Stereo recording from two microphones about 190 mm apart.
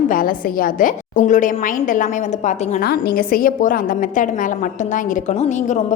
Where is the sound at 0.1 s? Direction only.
45° left (ahead or behind).